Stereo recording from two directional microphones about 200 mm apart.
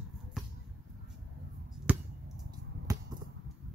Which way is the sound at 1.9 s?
10° right (ahead or behind).